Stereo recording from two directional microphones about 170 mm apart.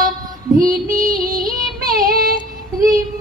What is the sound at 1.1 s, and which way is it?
Child singing, 20° right (ahead or behind).